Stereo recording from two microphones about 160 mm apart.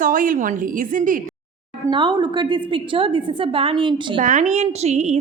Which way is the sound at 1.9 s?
30° right (ahead or behind).